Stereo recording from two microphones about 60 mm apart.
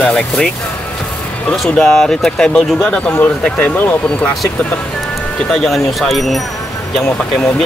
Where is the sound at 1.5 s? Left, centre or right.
Centre.